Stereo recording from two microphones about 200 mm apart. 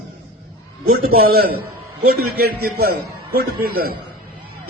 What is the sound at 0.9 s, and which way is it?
A man's voice, 50° right (ahead or behind).